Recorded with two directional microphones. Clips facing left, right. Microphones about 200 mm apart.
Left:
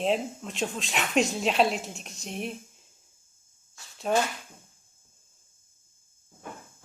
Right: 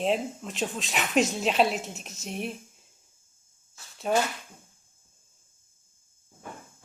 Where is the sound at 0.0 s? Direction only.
Centre (ahead or behind).